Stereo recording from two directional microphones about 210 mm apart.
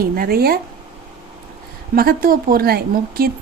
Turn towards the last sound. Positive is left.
turn(degrees=-45)  # may be behind; listen again after turning